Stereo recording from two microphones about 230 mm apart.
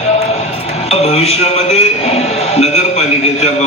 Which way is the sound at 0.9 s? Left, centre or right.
Left.